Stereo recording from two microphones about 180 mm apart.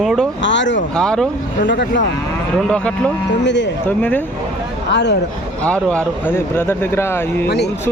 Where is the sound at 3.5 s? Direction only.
80° left.